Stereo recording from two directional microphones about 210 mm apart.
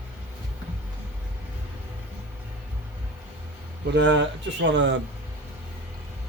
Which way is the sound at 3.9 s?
60° right (ahead or behind).